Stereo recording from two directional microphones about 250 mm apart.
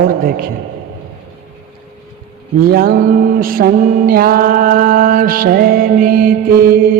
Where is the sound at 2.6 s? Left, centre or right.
Right.